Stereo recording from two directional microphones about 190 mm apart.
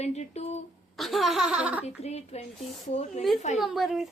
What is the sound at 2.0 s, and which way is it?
Speech, 35° left (ahead or behind).